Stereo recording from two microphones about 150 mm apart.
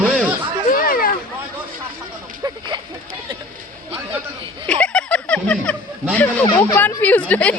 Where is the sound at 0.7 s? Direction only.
70° left (ahead or behind).